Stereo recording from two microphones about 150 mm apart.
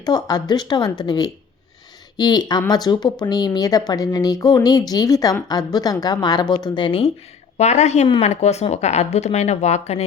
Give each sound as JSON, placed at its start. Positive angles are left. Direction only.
{"t": 0.0, "sound": "speech", "side_deg": 25}
{"t": 7.6, "sound": "speech", "side_deg": 50}